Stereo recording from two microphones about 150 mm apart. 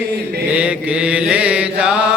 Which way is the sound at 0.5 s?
10° right (ahead or behind).